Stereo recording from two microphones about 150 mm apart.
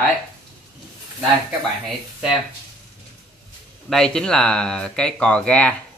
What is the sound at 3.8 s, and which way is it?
Speech, 5° left (ahead or behind).